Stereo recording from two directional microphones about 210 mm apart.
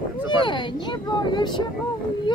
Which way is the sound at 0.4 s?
20° left (ahead or behind).